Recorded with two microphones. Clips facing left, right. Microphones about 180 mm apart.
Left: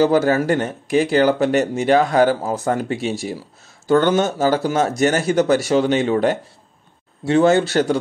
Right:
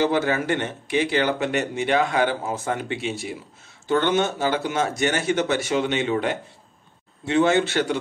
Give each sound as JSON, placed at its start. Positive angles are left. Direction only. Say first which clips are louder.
{"t": 0.0, "sound": "speech", "louder": "left 6 dB", "side_deg": 40}